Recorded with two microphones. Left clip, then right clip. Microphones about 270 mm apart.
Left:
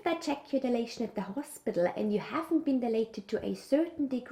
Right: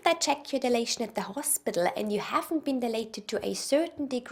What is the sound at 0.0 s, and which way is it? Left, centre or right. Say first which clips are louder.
A woman's voice: right 7 dB; right.